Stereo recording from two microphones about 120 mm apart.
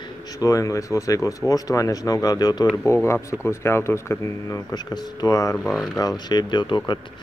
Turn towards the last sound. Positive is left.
turn(degrees=40)  # may be behind; listen again after turning